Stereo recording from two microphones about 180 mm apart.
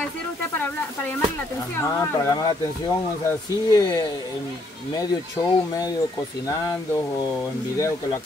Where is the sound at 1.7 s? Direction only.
15° left (ahead or behind).